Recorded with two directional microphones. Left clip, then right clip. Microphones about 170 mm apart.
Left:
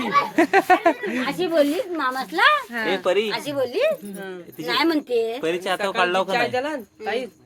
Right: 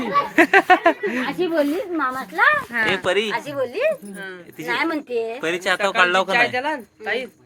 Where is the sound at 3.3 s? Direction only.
80° left.